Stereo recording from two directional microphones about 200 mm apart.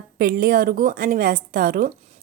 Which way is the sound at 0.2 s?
45° right (ahead or behind).